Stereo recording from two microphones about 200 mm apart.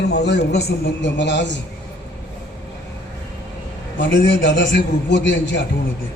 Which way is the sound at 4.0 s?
65° left (ahead or behind).